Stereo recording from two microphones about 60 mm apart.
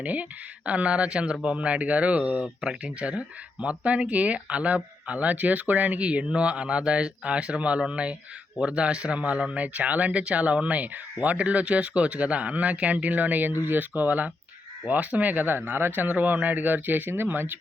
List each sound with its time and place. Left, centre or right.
0.0 s speech: right